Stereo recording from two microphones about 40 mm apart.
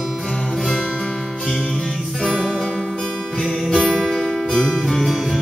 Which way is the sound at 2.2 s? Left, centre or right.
Centre.